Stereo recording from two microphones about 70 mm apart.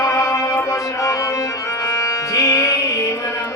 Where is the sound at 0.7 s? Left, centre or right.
Left.